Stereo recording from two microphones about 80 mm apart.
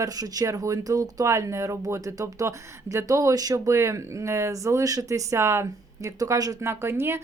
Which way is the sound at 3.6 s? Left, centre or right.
Right.